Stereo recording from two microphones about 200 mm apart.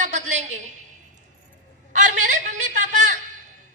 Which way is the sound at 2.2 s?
35° right (ahead or behind).